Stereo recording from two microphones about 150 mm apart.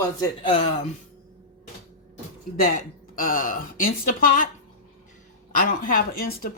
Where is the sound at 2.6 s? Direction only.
70° left (ahead or behind).